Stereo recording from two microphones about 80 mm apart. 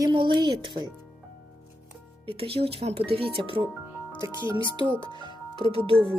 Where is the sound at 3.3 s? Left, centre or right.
Right.